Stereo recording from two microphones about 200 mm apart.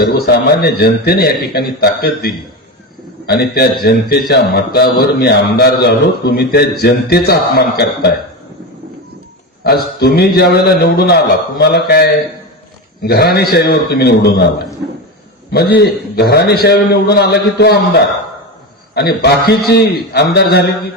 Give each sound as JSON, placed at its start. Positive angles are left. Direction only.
{"t": 0.0, "sound": "a man's voice", "side_deg": 50}
{"t": 9.6, "sound": "a man's voice", "side_deg": 50}
{"t": 15.5, "sound": "a man's voice", "side_deg": 55}